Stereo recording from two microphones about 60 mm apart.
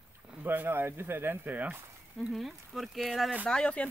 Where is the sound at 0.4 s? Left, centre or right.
Right.